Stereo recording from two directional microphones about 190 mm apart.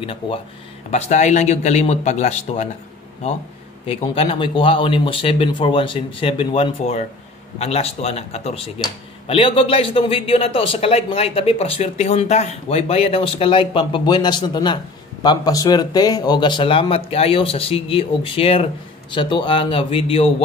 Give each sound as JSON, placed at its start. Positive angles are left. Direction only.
{"t": 0.0, "sound": "a man's voice", "side_deg": 30}
{"t": 3.8, "sound": "a man's voice", "side_deg": 30}